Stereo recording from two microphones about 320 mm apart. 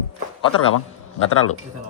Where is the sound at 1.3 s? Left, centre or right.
Left.